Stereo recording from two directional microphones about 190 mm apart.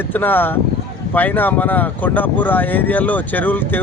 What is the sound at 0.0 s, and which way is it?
Speech, 10° left (ahead or behind).